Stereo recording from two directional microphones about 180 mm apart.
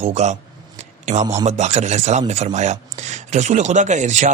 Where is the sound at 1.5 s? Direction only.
40° right (ahead or behind).